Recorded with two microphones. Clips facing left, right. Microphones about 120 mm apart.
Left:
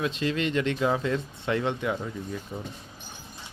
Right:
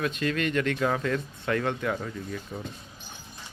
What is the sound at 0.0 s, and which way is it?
Speech, 25° left (ahead or behind).